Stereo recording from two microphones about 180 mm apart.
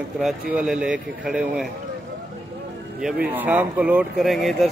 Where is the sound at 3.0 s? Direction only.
5° right (ahead or behind).